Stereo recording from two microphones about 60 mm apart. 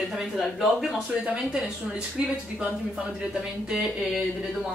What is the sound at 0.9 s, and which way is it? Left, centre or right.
Speech, centre.